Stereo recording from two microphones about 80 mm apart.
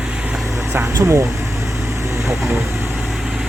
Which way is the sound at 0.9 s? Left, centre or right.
Right.